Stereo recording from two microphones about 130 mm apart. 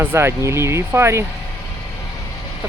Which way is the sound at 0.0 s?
20° right (ahead or behind).